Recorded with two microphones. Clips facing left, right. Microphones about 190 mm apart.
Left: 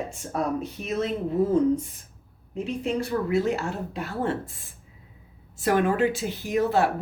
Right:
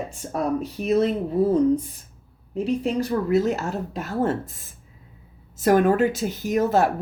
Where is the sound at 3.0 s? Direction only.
40° right (ahead or behind).